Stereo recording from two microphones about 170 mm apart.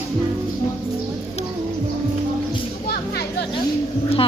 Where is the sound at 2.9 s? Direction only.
65° left (ahead or behind).